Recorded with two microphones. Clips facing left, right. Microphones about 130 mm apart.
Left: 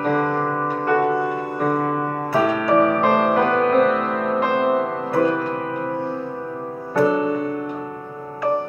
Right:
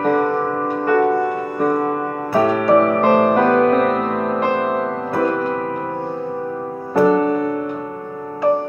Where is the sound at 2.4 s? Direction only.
45° right (ahead or behind).